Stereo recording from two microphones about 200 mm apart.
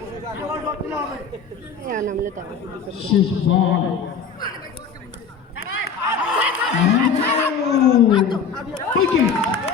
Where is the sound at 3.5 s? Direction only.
65° left (ahead or behind).